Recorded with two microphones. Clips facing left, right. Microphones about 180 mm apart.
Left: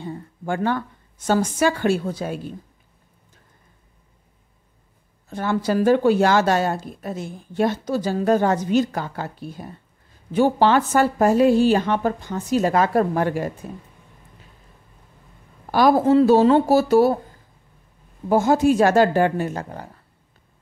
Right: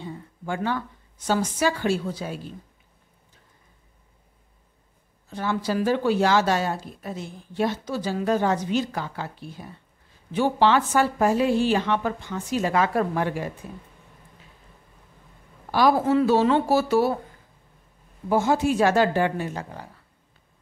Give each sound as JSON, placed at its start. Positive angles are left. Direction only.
{"t": 0.0, "sound": "a woman's voice", "side_deg": 50}
{"t": 5.3, "sound": "speech", "side_deg": 50}
{"t": 15.7, "sound": "a woman's voice", "side_deg": 45}
{"t": 18.3, "sound": "speech", "side_deg": 45}